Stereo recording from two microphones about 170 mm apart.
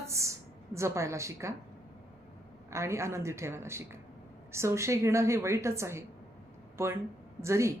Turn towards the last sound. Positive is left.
turn(degrees=-15)  # may be behind; listen again after turning